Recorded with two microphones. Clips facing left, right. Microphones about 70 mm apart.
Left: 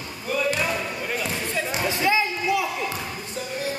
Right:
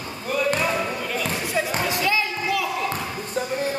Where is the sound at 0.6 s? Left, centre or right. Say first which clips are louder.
Right 3 dB; right.